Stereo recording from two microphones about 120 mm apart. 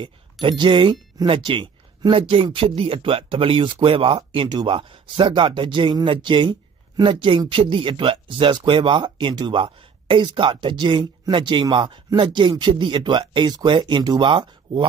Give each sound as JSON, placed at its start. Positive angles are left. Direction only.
{"t": 0.0, "sound": "speech", "side_deg": -40}